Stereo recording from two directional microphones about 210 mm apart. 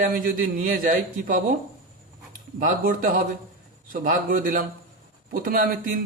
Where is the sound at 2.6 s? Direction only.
40° right (ahead or behind).